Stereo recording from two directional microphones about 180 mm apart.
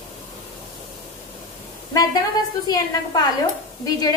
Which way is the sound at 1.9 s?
20° left (ahead or behind).